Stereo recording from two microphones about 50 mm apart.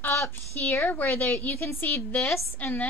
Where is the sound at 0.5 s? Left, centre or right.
Left.